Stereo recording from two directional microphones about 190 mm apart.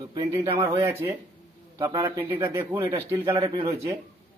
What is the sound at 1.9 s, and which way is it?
Speech, 25° right (ahead or behind).